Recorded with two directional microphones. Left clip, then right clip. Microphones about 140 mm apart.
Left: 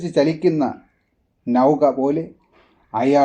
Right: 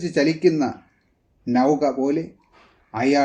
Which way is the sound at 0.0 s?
25° left (ahead or behind).